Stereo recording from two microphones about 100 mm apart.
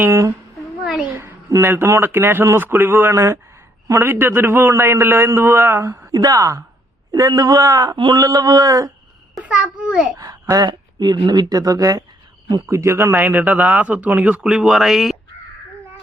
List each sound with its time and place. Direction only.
0.0 s speech: 30° right (ahead or behind)
1.1 s a sound: 30° right (ahead or behind)
1.7 s a man's voice: 25° right (ahead or behind)
6.1 s a man's voice: 40° right (ahead or behind)
7.9 s a sound: 55° right (ahead or behind)
8.2 s a man's voice: 40° right (ahead or behind)
9.4 s speech: 10° right (ahead or behind)
10.2 s speech: 40° right (ahead or behind); by 15.1 s centre (ahead or behind)